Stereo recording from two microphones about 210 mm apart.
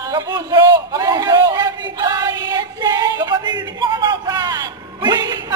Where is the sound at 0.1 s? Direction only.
20° right (ahead or behind).